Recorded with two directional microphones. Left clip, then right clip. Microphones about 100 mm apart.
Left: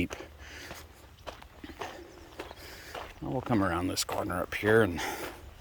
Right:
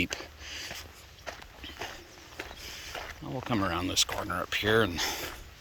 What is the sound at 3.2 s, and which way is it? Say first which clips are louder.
Speech: left 3 dB; 70° left (ahead or behind).